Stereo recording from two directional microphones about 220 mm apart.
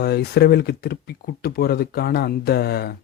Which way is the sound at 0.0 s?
45° left (ahead or behind).